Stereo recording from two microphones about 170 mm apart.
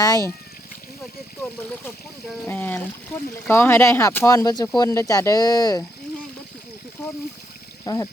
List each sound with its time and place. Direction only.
0.0 s speech: 20° left (ahead or behind)
1.4 s a sound: 10° left (ahead or behind)
2.5 s speech: 10° left (ahead or behind)
7.9 s speech: 20° left (ahead or behind)